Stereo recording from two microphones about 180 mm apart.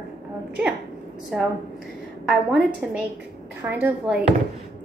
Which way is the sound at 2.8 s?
5° right (ahead or behind).